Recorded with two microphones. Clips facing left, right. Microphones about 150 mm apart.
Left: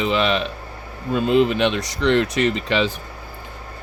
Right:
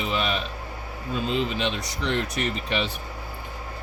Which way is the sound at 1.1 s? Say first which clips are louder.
Left 9 dB; 60° left (ahead or behind).